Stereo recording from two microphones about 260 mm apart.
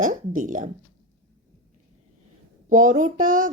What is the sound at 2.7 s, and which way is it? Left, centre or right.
Speech, right.